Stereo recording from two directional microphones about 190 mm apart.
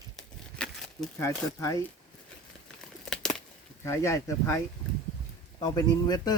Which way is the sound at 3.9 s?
15° left (ahead or behind).